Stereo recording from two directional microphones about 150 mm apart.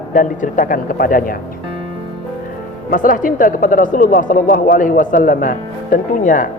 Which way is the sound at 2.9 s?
65° left (ahead or behind).